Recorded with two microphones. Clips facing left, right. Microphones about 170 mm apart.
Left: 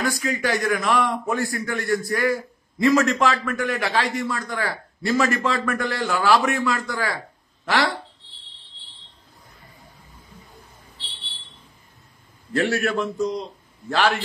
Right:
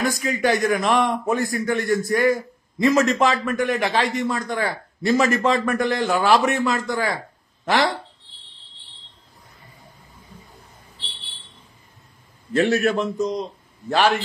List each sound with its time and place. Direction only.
0.0 s a man's voice: 20° right (ahead or behind)
12.5 s a man's voice: 20° right (ahead or behind)